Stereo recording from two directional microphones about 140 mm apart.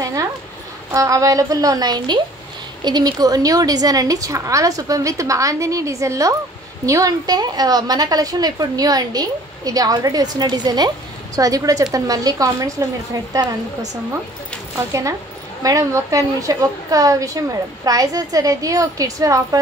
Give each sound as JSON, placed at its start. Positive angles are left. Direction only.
{"t": 0.0, "sound": "a sound", "side_deg": -25}
{"t": 0.9, "sound": "a woman's voice", "side_deg": -25}
{"t": 14.9, "sound": "a woman's voice", "side_deg": -20}